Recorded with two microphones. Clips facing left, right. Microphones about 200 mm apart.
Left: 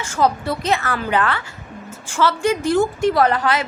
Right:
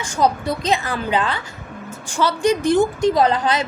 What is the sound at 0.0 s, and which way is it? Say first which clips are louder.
A woman's voice: even; 15° right (ahead or behind).